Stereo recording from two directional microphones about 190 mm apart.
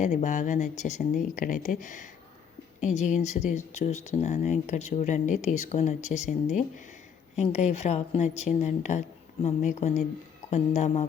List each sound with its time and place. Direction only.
0.0 s speech: 40° left (ahead or behind)